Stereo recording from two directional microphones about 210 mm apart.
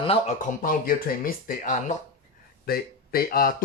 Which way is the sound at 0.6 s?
40° left (ahead or behind).